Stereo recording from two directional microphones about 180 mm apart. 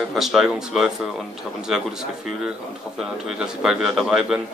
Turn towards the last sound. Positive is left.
turn(degrees=0)  # may be behind; listen again after turning